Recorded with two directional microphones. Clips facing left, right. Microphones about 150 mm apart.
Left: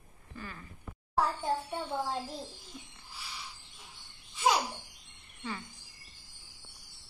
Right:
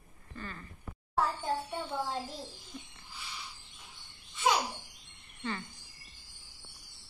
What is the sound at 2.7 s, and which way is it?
Owl, 5° left (ahead or behind).